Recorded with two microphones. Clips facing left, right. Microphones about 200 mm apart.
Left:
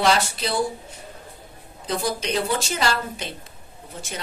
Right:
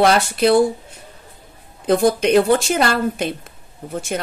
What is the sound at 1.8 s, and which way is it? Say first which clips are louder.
A woman's voice: right 11 dB; 55° right (ahead or behind).